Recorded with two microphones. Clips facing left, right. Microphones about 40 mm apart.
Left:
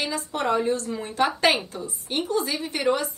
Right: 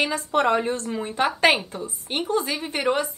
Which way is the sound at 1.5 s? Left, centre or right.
Right.